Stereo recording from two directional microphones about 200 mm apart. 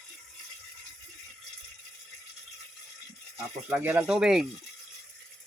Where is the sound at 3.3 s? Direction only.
10° right (ahead or behind).